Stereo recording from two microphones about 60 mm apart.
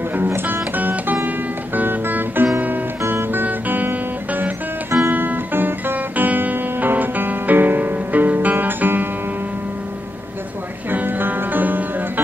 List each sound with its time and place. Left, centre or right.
0.2 s music: right
10.9 s music: right